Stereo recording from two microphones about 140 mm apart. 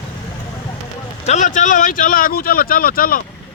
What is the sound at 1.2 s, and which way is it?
Speech, 60° left (ahead or behind).